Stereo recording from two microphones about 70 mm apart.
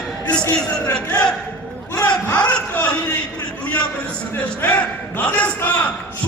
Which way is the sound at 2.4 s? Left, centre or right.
Left.